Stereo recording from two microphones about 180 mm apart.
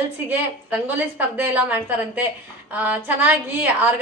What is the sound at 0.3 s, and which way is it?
A woman's voice, 10° right (ahead or behind).